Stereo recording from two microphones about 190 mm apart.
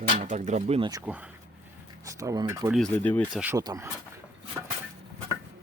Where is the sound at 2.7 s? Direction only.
5° left (ahead or behind).